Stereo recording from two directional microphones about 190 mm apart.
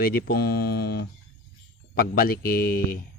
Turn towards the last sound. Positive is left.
turn(degrees=50)  # may be behind; listen again after turning